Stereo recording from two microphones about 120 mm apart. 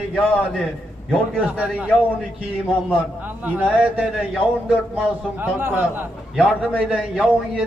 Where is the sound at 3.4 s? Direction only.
10° right (ahead or behind).